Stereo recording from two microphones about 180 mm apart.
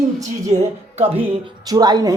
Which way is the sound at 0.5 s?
35° right (ahead or behind).